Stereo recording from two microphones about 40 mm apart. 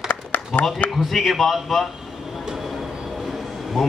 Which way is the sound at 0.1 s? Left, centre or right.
Left.